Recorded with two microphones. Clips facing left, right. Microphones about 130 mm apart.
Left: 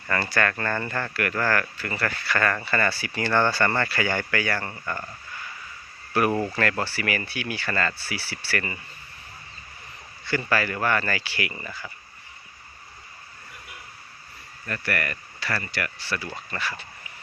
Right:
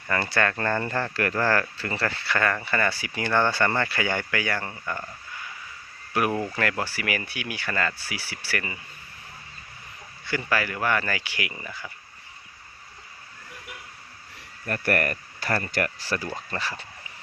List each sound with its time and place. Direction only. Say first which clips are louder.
0.1 s speech: even; 20° right (ahead or behind)
6.2 s speech: left 2 dB; 15° right (ahead or behind)
10.2 s speech: left 2 dB; 10° right (ahead or behind)
14.7 s speech: right 4 dB; 45° right (ahead or behind)